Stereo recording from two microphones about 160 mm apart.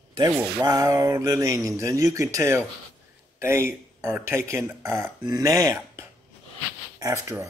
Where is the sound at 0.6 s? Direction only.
25° right (ahead or behind).